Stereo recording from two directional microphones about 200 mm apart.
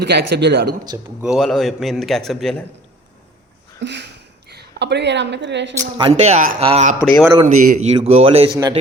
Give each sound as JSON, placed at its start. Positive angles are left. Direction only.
{"t": 0.0, "sound": "speech", "side_deg": -55}
{"t": 1.2, "sound": "a man's voice", "side_deg": 0}
{"t": 3.8, "sound": "a sound", "side_deg": -60}
{"t": 6.0, "sound": "speech", "side_deg": -30}
{"t": 7.0, "sound": "a man's voice", "side_deg": 5}
{"t": 7.4, "sound": "speech", "side_deg": -40}